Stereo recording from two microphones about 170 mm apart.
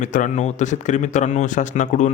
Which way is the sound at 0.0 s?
45° left (ahead or behind).